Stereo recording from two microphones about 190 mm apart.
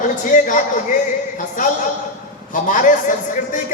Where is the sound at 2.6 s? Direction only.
40° left (ahead or behind).